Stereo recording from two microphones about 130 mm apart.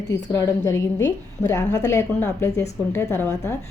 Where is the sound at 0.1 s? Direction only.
25° left (ahead or behind).